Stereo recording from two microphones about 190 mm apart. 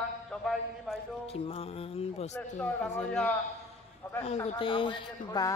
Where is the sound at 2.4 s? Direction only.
10° left (ahead or behind).